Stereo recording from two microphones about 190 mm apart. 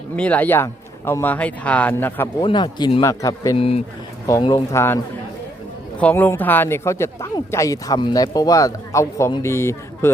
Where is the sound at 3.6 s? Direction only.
30° left (ahead or behind).